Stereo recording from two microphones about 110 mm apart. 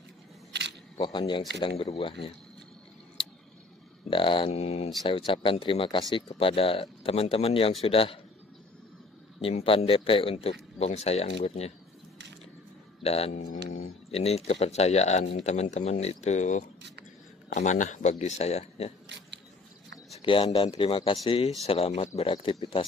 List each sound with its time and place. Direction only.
0.9 s speech: 45° left (ahead or behind)
4.1 s speech: 50° left (ahead or behind); by 4.9 s 65° left (ahead or behind)
5.0 s speech: 50° left (ahead or behind)
9.4 s speech: 60° left (ahead or behind)
13.0 s speech: 70° left (ahead or behind); by 18.1 s 90° left
18.2 s speech: 75° left (ahead or behind)
20.1 s speech: 55° left (ahead or behind)